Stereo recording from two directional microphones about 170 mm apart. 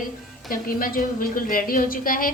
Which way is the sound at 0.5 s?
55° left (ahead or behind).